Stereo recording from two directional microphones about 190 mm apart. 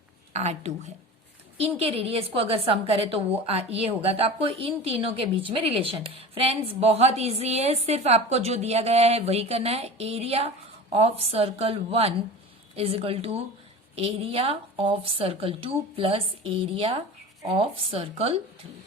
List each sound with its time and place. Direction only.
0.3 s a woman's voice: 35° right (ahead or behind)